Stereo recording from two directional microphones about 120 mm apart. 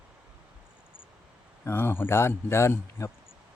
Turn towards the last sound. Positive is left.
turn(degrees=25)  # may be behind; listen again after turning